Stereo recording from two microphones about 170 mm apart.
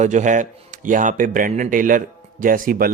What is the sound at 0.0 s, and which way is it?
Speech, 45° right (ahead or behind).